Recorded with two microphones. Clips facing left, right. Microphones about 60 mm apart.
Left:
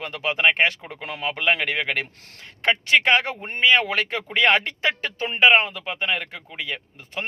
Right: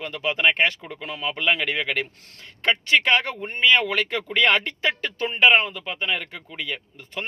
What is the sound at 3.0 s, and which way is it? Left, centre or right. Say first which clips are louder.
Speech: left 1 dB; left.